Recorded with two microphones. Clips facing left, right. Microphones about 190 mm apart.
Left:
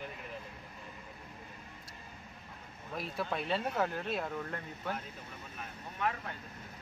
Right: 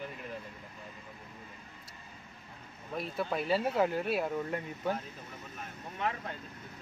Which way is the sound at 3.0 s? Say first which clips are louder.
Right 3 dB; centre (ahead or behind).